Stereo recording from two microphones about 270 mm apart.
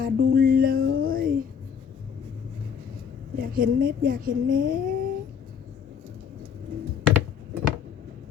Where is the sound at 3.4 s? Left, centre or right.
Right.